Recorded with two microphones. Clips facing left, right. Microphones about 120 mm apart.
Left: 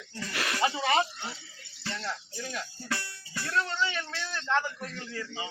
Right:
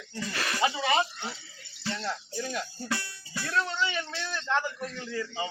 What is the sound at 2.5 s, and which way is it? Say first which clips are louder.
A man's voice: right 1 dB; 10° right (ahead or behind).